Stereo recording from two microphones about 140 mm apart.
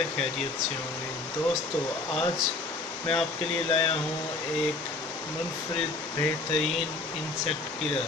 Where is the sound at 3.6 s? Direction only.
45° left (ahead or behind).